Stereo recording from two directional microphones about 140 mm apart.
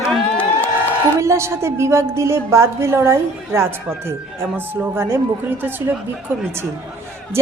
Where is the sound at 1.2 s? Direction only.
20° right (ahead or behind).